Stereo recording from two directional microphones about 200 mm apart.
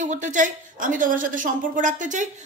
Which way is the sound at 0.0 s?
40° right (ahead or behind).